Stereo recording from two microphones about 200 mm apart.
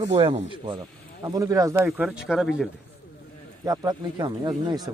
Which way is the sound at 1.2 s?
15° right (ahead or behind).